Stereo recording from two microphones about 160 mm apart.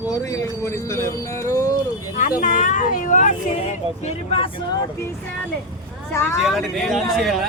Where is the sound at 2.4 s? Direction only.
50° left (ahead or behind).